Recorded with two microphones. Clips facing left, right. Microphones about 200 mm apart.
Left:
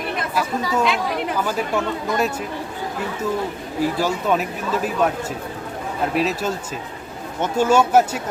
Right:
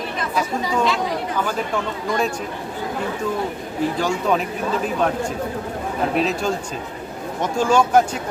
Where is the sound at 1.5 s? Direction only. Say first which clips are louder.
Left 2 dB; 5° left (ahead or behind).